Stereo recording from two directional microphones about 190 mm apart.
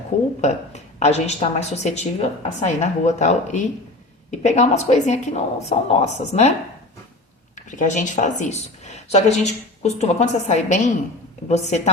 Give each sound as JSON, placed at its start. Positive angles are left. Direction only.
{"t": 0.1, "sound": "a woman's voice", "side_deg": 35}
{"t": 7.7, "sound": "a woman's voice", "side_deg": 40}